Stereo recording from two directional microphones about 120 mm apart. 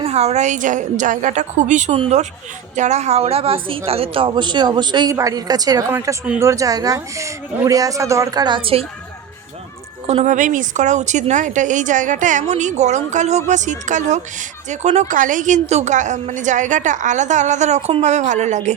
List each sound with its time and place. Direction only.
0.0 s a woman's voice: 60° right (ahead or behind); by 2.0 s 85° right
2.0 s a woman's voice: 65° right (ahead or behind); by 8.8 s 45° right (ahead or behind)
10.1 s a woman's voice: 75° right (ahead or behind); by 14.2 s 90° right
14.7 s a woman's voice: 65° right (ahead or behind)
18.0 s a woman's voice: 80° right